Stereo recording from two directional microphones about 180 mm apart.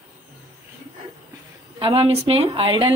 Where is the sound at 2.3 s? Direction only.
30° right (ahead or behind).